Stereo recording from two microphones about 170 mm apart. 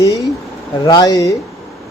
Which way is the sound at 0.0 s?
20° left (ahead or behind).